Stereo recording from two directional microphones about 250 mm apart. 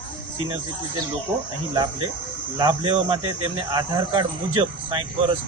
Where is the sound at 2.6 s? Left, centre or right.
Centre.